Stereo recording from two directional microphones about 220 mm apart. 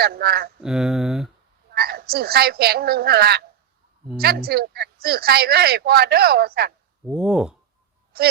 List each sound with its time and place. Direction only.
0.0 s speech: 45° right (ahead or behind)
0.6 s speech: centre (ahead or behind)
1.7 s speech: 45° right (ahead or behind)
7.0 s speech: 5° right (ahead or behind)